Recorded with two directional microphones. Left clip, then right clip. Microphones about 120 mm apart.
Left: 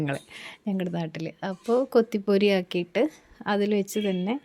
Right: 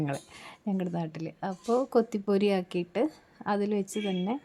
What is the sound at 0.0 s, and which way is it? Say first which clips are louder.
A woman's voice: left 3 dB; 15° left (ahead or behind).